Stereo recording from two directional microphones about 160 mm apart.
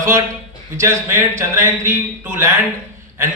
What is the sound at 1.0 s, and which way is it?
A man's voice, 15° right (ahead or behind).